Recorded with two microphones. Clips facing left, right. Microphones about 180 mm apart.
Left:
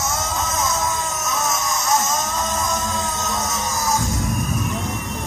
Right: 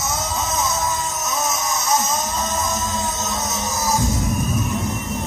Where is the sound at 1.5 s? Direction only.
Centre (ahead or behind).